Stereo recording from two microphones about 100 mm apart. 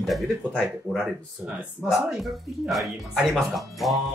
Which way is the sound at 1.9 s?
5° right (ahead or behind).